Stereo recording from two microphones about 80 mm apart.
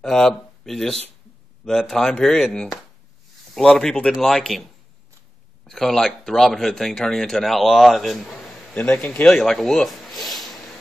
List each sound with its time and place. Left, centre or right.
0.0 s speech: centre
5.7 s speech: centre
8.7 s speech: left
9.3 s a sound: centre